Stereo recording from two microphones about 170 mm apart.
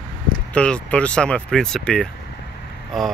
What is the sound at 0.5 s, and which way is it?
Speech, 5° left (ahead or behind).